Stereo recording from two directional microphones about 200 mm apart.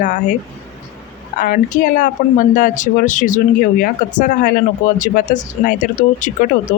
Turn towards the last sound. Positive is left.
turn(degrees=40)  # may be behind; listen again after turning